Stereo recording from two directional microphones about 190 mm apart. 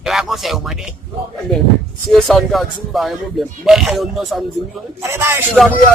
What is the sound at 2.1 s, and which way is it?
Speech, centre (ahead or behind).